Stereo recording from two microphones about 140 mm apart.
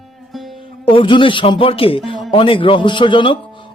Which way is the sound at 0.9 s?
35° left (ahead or behind).